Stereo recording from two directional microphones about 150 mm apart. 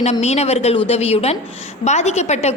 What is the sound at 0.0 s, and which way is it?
A woman's voice, 45° left (ahead or behind).